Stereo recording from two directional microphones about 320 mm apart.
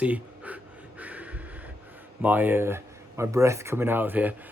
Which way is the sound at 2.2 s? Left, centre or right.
Centre.